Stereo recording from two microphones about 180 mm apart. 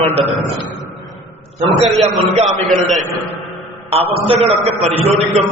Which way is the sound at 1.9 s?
Centre (ahead or behind).